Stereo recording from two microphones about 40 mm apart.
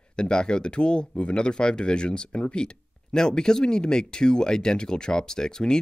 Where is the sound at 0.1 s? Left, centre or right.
Left.